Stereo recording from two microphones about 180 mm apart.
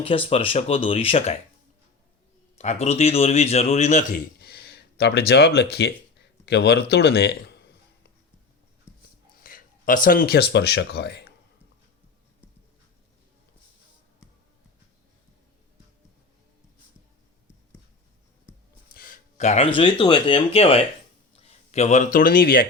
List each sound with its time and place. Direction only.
0.0 s a man's voice: 30° left (ahead or behind)
2.6 s a man's voice: 35° left (ahead or behind)
4.4 s a sound: 65° left (ahead or behind)
6.4 s a man's voice: 65° left (ahead or behind)
9.4 s speech: 50° left (ahead or behind)
18.9 s speech: 50° left (ahead or behind)